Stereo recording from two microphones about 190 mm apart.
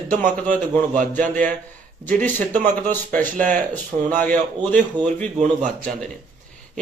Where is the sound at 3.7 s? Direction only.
10° left (ahead or behind).